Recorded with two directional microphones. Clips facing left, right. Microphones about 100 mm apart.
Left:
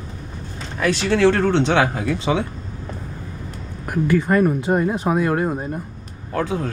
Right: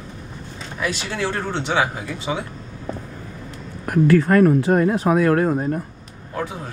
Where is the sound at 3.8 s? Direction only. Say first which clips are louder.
Right 4 dB; 5° left (ahead or behind).